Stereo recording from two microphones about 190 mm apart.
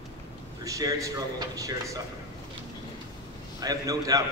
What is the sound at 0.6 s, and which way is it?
Speech, 15° right (ahead or behind).